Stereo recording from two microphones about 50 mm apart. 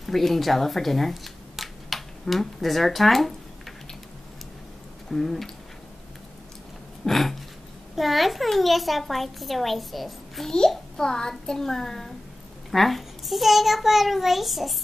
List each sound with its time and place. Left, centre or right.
0.0 s speech: centre
5.1 s a child's voice: centre
7.1 s a child's voice: centre
11.0 s a child's voice: centre